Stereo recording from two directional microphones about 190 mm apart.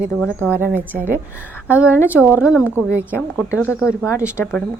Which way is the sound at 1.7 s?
5° right (ahead or behind).